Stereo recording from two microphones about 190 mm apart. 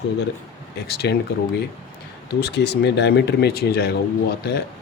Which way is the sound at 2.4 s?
60° left (ahead or behind).